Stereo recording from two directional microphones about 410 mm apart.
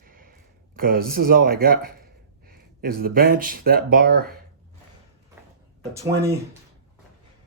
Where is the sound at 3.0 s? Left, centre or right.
Right.